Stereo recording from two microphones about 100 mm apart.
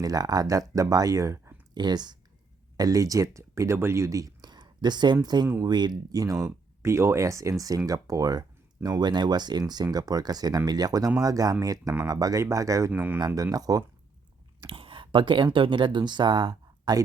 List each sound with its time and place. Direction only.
0.0 s speech: 40° right (ahead or behind)
1.7 s speech: 45° right (ahead or behind)
12.9 s speech: 20° right (ahead or behind)
13.1 s speech: 40° right (ahead or behind)
14.7 s a sound: 65° right (ahead or behind)
15.5 s speech: 55° right (ahead or behind)